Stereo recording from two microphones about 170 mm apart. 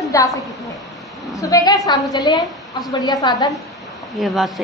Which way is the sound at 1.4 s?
20° left (ahead or behind).